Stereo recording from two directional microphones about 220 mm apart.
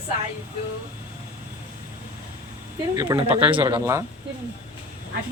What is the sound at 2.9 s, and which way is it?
Speech, 15° right (ahead or behind).